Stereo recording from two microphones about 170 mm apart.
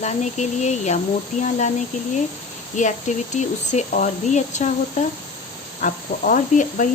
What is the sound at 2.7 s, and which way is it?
Speech, 45° left (ahead or behind).